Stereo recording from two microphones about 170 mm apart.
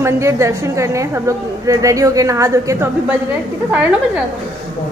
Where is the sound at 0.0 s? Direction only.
15° right (ahead or behind).